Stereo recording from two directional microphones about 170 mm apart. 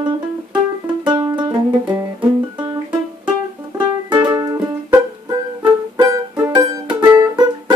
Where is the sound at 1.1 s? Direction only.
25° right (ahead or behind).